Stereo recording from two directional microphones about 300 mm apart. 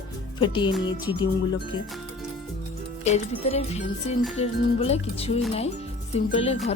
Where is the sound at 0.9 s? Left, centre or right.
Centre.